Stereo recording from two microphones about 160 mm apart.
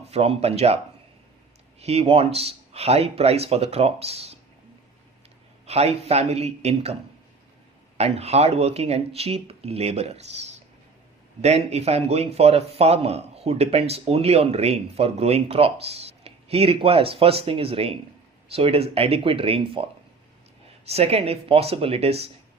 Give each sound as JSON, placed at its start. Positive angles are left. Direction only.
{"t": 0.0, "sound": "speech", "side_deg": -40}
{"t": 1.8, "sound": "speech", "side_deg": -40}
{"t": 5.6, "sound": "speech", "side_deg": -40}
{"t": 7.9, "sound": "speech", "side_deg": -40}